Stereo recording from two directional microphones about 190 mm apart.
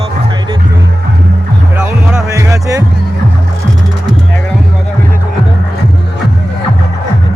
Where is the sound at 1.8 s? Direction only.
10° right (ahead or behind).